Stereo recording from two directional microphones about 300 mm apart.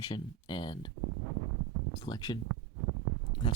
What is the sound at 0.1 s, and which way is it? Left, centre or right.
Speech, centre.